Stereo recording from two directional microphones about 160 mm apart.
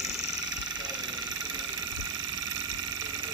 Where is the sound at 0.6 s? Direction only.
25° right (ahead or behind).